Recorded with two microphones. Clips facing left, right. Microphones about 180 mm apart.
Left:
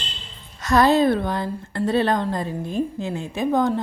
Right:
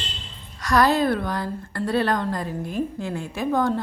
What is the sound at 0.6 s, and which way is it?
A woman's voice, 25° left (ahead or behind).